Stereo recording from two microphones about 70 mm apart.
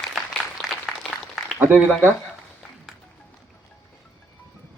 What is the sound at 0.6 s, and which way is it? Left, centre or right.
Applause, centre.